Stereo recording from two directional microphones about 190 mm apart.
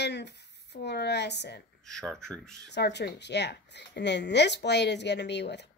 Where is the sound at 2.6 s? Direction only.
60° left (ahead or behind).